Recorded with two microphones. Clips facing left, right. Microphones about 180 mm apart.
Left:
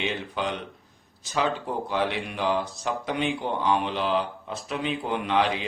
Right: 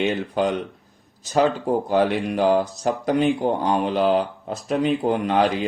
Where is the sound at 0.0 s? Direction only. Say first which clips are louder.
Right 8 dB; 45° right (ahead or behind).